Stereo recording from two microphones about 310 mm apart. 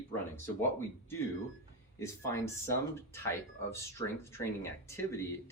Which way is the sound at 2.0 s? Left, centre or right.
Centre.